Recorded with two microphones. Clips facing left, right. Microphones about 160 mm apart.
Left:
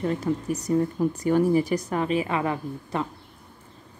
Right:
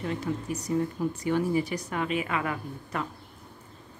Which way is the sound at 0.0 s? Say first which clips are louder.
Left 5 dB; 40° left (ahead or behind).